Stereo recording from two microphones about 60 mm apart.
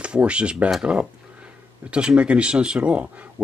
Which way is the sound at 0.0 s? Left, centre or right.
Centre.